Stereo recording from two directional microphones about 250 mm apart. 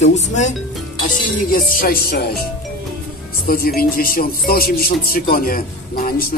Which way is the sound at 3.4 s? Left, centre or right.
Left.